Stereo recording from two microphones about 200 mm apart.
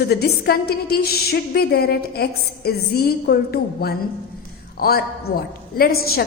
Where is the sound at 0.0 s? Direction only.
50° left (ahead or behind).